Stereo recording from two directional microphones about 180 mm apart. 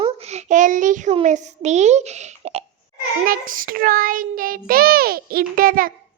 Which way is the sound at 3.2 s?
50° right (ahead or behind).